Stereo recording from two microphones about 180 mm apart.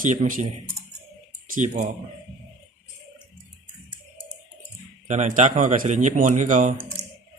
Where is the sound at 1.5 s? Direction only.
45° right (ahead or behind).